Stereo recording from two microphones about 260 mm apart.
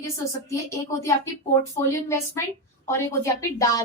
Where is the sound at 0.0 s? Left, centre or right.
Centre.